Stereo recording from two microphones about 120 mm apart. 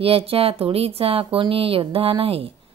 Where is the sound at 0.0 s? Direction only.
55° right (ahead or behind).